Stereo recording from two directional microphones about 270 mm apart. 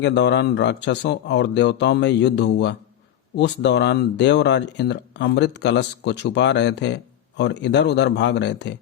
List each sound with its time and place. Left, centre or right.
0.0 s speech: left